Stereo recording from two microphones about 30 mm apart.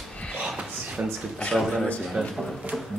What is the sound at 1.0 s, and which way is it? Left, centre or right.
Speech, right.